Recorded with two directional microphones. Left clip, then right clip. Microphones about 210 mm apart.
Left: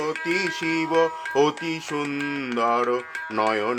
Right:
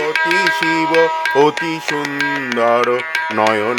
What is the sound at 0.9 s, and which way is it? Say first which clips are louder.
Music: right 7 dB; 45° right (ahead or behind).